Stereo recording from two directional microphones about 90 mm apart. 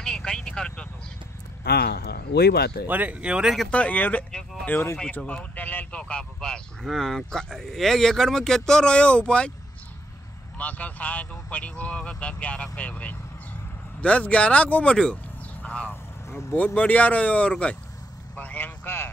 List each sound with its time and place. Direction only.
0.0 s vehicle: 10° left (ahead or behind)
2.9 s speech: 15° right (ahead or behind)
3.7 s speech: 15° left (ahead or behind)
10.6 s speech: 15° left (ahead or behind)
16.3 s vehicle: 30° left (ahead or behind)
16.5 s speech: 15° left (ahead or behind)
18.3 s vehicle: 20° left (ahead or behind)